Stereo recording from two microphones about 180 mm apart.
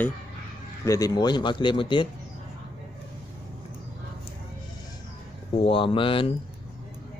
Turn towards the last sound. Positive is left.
turn(degrees=30)  # may be behind; listen again after turning